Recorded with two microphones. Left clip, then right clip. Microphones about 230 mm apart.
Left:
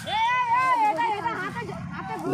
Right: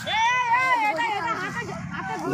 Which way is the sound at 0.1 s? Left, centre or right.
Right.